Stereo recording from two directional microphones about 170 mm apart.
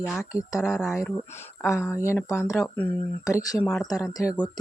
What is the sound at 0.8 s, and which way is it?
Speech, centre (ahead or behind).